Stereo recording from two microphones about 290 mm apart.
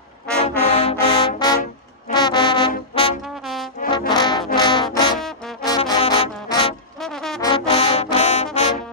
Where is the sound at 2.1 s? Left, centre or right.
Centre.